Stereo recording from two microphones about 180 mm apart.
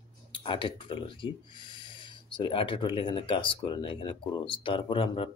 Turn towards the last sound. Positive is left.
turn(degrees=30)  # may be behind; listen again after turning